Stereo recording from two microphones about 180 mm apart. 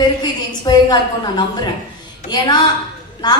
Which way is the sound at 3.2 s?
25° left (ahead or behind).